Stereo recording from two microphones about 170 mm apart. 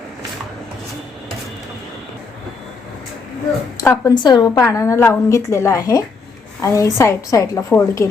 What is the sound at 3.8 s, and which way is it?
A woman's voice, 20° left (ahead or behind).